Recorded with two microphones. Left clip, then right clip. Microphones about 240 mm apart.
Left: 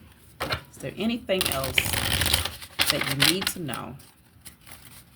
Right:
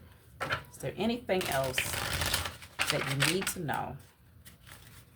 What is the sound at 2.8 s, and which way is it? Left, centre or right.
Speech, left.